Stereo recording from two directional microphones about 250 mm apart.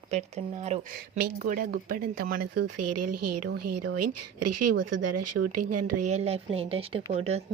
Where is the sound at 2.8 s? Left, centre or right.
Right.